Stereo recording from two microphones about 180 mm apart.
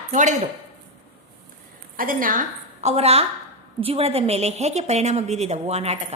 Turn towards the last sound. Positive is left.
turn(degrees=-35)  # may be behind; listen again after turning